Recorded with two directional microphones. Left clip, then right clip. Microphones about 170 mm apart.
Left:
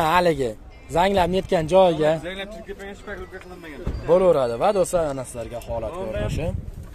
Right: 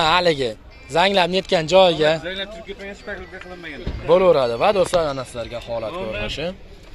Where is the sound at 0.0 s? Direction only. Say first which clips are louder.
Right 2 dB; 20° left (ahead or behind).